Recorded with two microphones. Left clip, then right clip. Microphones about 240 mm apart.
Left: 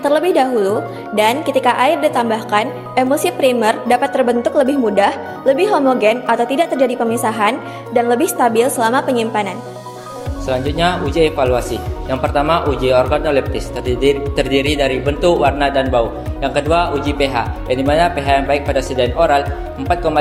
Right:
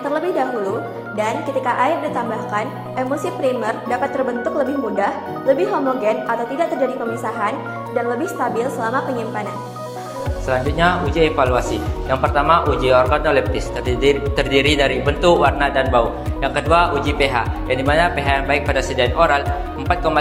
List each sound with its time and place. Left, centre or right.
0.0 s a woman's voice: left
10.5 s speech: left